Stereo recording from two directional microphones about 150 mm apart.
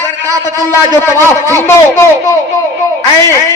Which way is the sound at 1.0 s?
15° left (ahead or behind).